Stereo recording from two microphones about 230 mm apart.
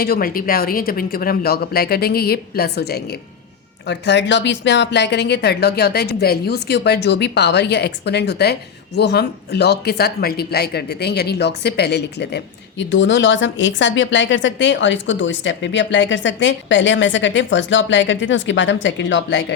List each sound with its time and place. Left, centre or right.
0.0 s speech: left